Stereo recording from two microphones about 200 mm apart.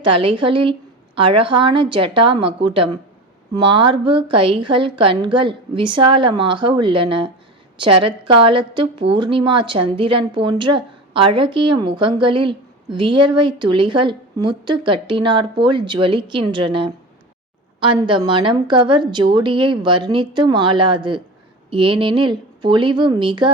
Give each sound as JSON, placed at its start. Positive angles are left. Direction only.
{"t": 0.0, "sound": "a woman's voice", "side_deg": -25}